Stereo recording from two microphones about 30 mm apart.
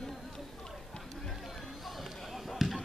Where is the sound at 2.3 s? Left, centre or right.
Centre.